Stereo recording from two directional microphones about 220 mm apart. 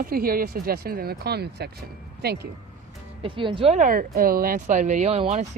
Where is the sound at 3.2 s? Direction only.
20° right (ahead or behind).